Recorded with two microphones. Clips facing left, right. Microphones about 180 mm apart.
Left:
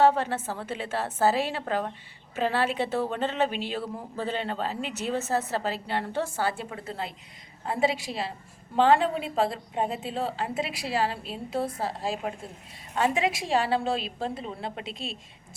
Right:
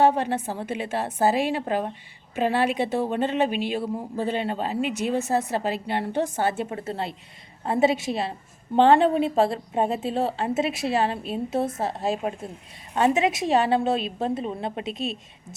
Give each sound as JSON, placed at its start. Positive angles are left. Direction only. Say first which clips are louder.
{"t": 0.0, "sound": "a woman's voice", "louder": "right 2 dB", "side_deg": -15}